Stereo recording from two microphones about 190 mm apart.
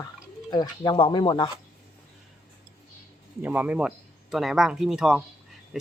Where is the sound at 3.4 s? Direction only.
10° right (ahead or behind).